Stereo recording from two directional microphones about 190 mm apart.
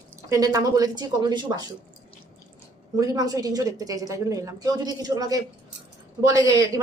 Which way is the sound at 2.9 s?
20° right (ahead or behind).